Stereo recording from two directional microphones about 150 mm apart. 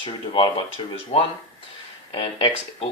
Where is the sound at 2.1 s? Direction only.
35° left (ahead or behind).